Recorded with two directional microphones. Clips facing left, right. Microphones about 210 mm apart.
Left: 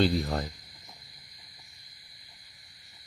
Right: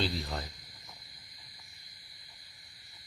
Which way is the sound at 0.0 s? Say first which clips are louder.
Left 8 dB; 55° left (ahead or behind).